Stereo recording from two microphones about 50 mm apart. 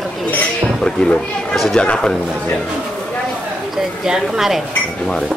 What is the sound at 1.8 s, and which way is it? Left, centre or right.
Speech, left.